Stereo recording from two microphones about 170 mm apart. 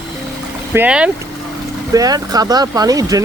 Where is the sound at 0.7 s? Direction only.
10° right (ahead or behind).